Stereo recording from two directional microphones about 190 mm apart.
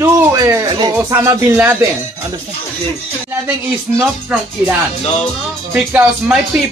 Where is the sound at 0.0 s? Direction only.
15° right (ahead or behind).